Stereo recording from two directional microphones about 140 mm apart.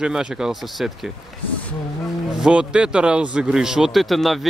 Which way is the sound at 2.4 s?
10° right (ahead or behind).